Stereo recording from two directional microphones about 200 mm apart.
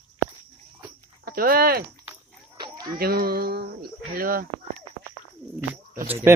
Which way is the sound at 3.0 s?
50° right (ahead or behind).